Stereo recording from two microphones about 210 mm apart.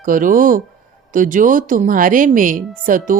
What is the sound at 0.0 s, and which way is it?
Speech, 40° right (ahead or behind).